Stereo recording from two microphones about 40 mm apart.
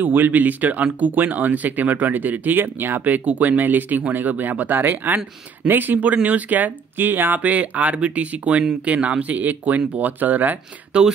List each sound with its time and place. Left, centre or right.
0.0 s speech: right
2.6 s speech: right
7.3 s speech: right
10.9 s speech: centre